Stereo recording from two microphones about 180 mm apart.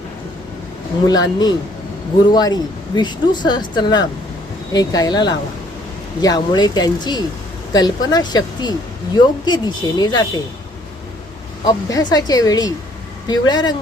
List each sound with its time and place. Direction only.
1.0 s speech: 20° left (ahead or behind)
11.6 s speech: 20° left (ahead or behind)